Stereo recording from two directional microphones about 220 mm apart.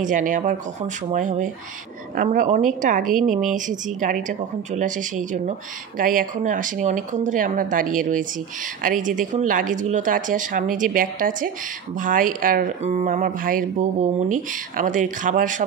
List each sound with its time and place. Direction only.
0.0 s a woman's voice: 35° right (ahead or behind)